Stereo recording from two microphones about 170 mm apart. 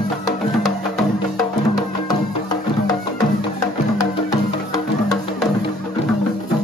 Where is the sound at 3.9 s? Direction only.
20° left (ahead or behind).